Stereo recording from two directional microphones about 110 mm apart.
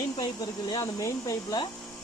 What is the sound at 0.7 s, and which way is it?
Speech, 30° left (ahead or behind).